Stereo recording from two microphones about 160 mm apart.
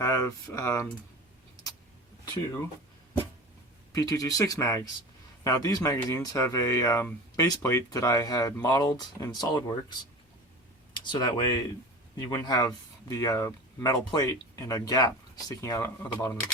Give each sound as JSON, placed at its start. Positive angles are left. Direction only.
{"t": 0.0, "sound": "speech", "side_deg": 20}
{"t": 3.9, "sound": "speech", "side_deg": 20}
{"t": 10.9, "sound": "speech", "side_deg": 30}